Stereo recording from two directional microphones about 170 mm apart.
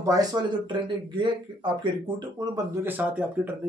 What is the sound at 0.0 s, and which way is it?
Speech, 20° right (ahead or behind).